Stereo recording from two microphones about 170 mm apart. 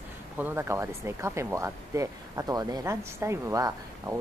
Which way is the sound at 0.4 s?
15° right (ahead or behind).